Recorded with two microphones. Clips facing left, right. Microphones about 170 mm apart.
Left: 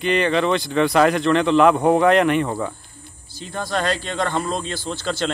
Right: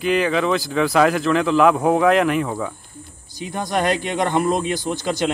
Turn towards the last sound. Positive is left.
turn(degrees=-15)  # may be behind; listen again after turning